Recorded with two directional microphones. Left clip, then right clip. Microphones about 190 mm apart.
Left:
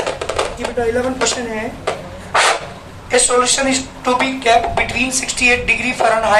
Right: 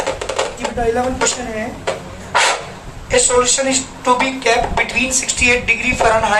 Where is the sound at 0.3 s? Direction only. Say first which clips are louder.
Even; 25° left (ahead or behind).